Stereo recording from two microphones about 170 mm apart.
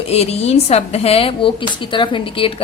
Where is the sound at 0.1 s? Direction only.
40° left (ahead or behind).